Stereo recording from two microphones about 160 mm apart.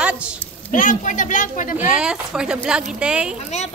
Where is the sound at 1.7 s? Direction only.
5° right (ahead or behind).